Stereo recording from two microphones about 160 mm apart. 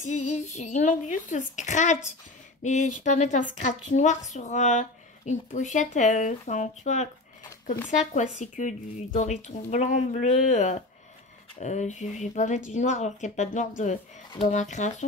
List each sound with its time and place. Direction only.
0.0 s speech: 50° left (ahead or behind)